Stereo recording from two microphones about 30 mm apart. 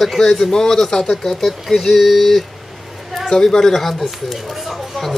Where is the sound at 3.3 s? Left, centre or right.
Centre.